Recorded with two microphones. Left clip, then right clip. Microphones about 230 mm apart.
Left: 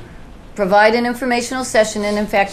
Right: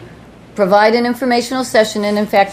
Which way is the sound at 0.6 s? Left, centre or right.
Right.